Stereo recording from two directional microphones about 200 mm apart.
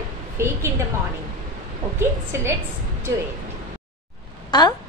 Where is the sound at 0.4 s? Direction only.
10° right (ahead or behind).